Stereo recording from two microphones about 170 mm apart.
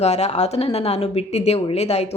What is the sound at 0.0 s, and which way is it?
Speech, 40° left (ahead or behind).